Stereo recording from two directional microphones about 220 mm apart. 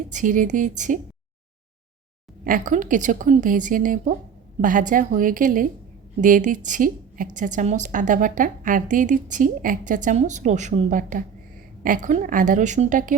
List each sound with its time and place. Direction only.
0.1 s a woman's voice: 35° right (ahead or behind)
2.4 s a woman's voice: 35° right (ahead or behind)